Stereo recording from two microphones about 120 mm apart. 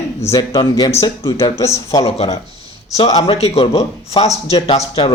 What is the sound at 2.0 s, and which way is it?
A man's voice, 55° left (ahead or behind).